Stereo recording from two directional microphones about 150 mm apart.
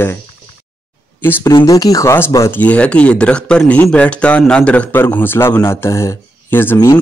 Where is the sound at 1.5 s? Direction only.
25° left (ahead or behind).